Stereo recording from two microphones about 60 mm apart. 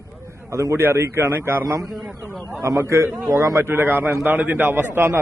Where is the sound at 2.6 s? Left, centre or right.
Right.